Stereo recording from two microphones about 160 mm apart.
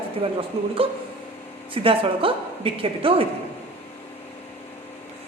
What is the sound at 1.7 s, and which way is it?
A man's voice, 35° right (ahead or behind).